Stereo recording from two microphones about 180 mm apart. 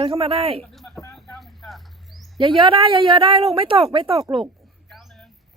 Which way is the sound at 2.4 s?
30° right (ahead or behind).